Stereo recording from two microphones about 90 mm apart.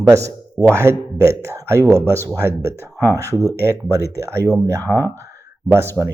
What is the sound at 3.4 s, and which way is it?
Speech, 30° left (ahead or behind).